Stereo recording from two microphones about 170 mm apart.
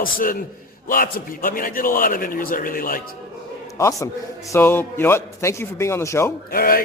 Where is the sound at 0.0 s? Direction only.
55° left (ahead or behind).